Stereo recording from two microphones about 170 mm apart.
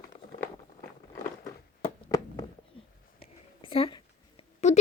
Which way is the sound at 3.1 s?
30° left (ahead or behind).